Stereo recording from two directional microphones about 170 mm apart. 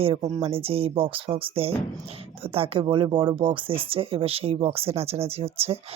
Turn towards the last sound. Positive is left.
turn(degrees=-35)  # may be behind; listen again after turning